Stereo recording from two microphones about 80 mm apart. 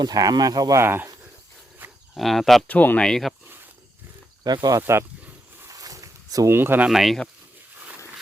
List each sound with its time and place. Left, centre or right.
0.0 s speech: right
0.8 s speech: right
1.8 s insect: right
2.1 s speech: centre
2.6 s speech: centre
3.1 s speech: centre
4.4 s speech: right
4.8 s speech: right
5.6 s a sound: right
6.5 s speech: right
6.8 s speech: centre